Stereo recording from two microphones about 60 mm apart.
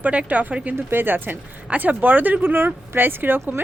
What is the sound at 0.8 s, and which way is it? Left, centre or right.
Speech, right.